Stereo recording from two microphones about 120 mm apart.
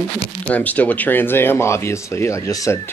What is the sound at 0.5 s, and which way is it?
Speech, 15° left (ahead or behind).